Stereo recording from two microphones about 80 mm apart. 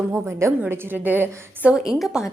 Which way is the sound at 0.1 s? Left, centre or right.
Right.